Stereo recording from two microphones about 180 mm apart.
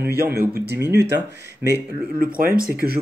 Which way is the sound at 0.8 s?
70° right (ahead or behind).